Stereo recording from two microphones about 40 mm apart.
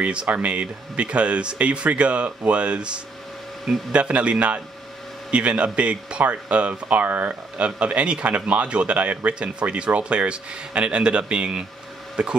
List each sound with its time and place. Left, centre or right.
0.0 s speech: right
9.3 s speech: right